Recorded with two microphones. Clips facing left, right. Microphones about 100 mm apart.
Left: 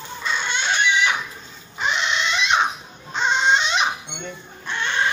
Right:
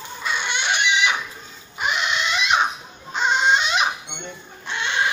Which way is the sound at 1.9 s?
30° left (ahead or behind).